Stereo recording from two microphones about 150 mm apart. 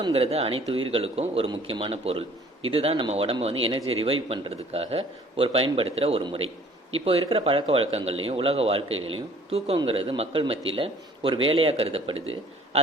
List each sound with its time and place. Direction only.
0.1 s speech: 40° right (ahead or behind)